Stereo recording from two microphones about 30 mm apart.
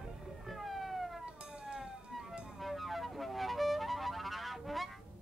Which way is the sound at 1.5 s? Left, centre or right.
Right.